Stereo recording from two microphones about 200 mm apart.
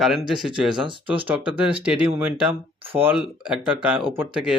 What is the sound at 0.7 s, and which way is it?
Speech, 25° right (ahead or behind).